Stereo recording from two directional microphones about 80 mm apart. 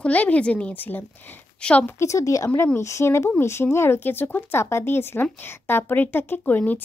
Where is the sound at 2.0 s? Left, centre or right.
Left.